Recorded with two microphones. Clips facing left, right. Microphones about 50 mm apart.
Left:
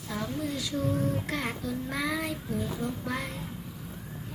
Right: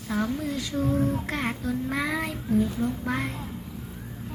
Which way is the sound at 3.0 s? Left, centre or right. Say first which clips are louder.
Right 5 dB; right.